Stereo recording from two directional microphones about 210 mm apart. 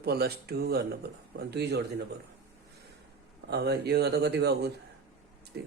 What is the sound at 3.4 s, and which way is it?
Speech, 50° right (ahead or behind).